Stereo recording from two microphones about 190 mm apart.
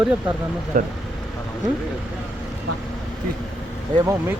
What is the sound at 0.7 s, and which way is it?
Speech, 45° right (ahead or behind).